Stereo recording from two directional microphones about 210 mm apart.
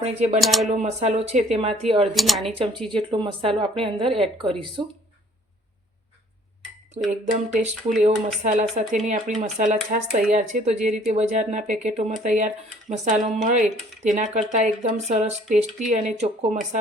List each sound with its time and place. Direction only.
0.0 s a woman's voice: 30° right (ahead or behind)
0.4 s speech: centre (ahead or behind)
0.7 s speech: 30° right (ahead or behind)
2.1 s speech: centre (ahead or behind)
2.9 s a woman's voice: 25° right (ahead or behind)
7.0 s speech: 30° right (ahead or behind)